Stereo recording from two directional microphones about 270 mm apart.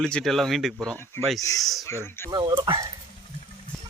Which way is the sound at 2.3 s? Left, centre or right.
Centre.